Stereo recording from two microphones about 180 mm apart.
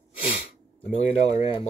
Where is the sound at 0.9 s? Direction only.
35° left (ahead or behind).